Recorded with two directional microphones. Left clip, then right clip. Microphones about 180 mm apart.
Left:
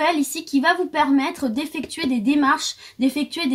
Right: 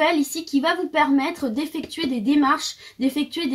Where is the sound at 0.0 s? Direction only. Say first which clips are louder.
Even; 50° left (ahead or behind).